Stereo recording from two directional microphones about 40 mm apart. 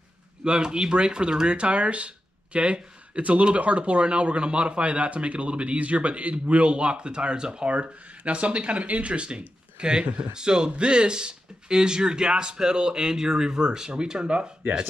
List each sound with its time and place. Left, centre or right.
0.4 s speech: right
7.7 s speech: right